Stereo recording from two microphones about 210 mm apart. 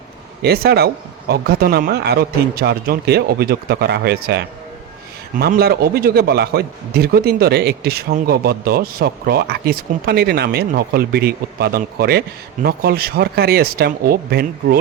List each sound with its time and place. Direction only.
0.4 s a man's voice: 50° right (ahead or behind)